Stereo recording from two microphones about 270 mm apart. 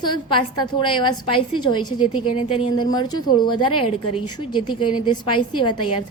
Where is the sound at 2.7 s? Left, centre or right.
Centre.